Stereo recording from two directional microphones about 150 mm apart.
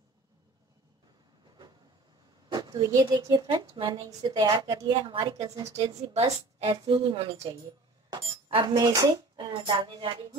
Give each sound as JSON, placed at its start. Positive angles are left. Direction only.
{"t": 2.5, "sound": "a woman's voice", "side_deg": -25}
{"t": 8.1, "sound": "chink", "side_deg": -35}
{"t": 8.7, "sound": "a woman's voice", "side_deg": -25}